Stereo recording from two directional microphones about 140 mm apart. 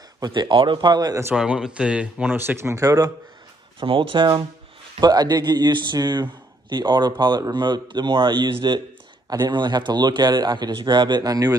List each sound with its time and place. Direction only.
0.2 s a man's voice: 35° right (ahead or behind)
1.3 s speech: 5° right (ahead or behind); by 3.1 s 25° right (ahead or behind)
3.8 s a man's voice: 40° right (ahead or behind)